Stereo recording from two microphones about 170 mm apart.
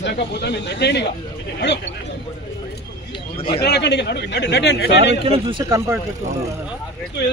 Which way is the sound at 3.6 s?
80° left.